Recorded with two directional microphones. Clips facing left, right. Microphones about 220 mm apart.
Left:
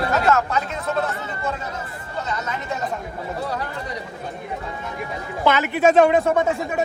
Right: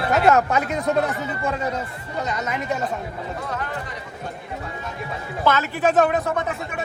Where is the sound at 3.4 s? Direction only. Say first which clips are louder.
Left 3 dB; 35° left (ahead or behind).